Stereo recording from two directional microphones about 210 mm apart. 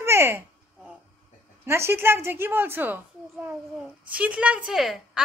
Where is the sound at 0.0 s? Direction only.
10° right (ahead or behind).